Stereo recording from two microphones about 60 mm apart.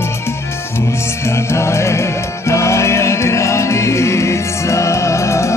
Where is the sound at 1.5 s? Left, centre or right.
Left.